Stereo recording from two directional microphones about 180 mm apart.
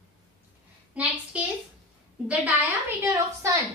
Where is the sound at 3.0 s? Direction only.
15° right (ahead or behind).